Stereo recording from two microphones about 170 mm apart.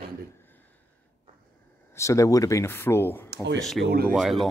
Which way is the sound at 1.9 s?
20° left (ahead or behind).